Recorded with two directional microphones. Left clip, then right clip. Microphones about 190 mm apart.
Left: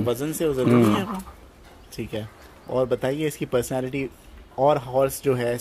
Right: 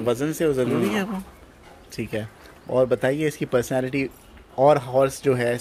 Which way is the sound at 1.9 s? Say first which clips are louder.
Right 2 dB; 15° right (ahead or behind).